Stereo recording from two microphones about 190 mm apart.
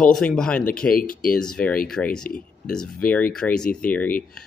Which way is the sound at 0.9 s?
50° left (ahead or behind).